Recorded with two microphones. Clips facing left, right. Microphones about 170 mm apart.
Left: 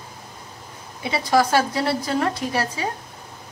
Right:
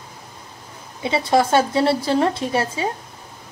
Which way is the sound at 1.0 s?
25° right (ahead or behind).